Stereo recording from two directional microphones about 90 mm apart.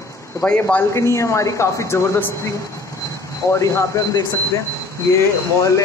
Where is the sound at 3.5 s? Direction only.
35° left (ahead or behind).